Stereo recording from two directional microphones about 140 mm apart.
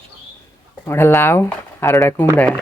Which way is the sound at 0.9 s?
15° left (ahead or behind).